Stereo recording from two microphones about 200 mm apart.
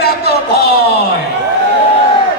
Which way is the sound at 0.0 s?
50° left (ahead or behind).